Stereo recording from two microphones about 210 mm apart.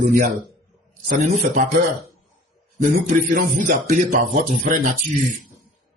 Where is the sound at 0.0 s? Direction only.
40° right (ahead or behind).